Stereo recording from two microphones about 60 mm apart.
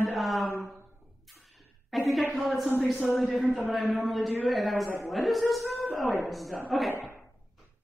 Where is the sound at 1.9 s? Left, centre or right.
Centre.